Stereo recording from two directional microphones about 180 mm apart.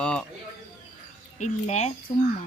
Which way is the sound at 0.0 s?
5° left (ahead or behind).